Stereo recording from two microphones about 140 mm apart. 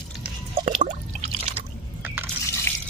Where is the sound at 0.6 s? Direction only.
60° right (ahead or behind).